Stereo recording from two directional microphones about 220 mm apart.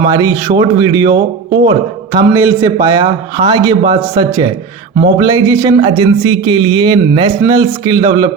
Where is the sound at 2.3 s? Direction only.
15° right (ahead or behind).